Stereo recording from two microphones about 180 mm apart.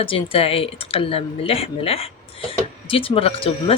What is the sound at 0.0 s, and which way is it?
Speech, 30° left (ahead or behind).